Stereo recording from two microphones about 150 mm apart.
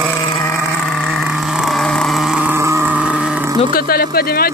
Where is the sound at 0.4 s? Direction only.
15° left (ahead or behind).